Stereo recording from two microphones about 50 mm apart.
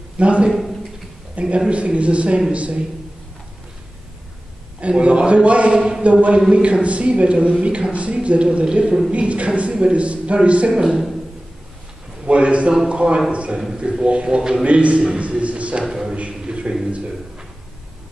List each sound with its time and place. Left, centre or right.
0.2 s a man's voice: right
4.7 s a man's voice: right
5.8 s a man's voice: centre
6.5 s a man's voice: right
10.7 s a man's voice: centre
12.3 s a man's voice: right
14.6 s a man's voice: right
15.9 s a sound: centre
16.2 s a sound: right